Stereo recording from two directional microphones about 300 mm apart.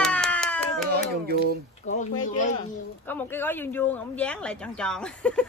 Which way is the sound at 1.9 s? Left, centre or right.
Left.